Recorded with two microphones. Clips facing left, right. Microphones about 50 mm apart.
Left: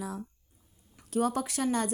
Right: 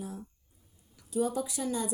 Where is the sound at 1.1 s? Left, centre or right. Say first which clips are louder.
Left 2 dB; left.